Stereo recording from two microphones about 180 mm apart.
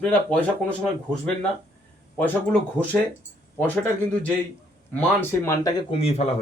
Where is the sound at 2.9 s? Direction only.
10° left (ahead or behind).